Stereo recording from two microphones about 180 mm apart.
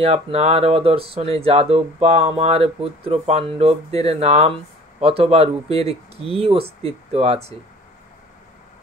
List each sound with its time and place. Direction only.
0.0 s speech: 35° right (ahead or behind)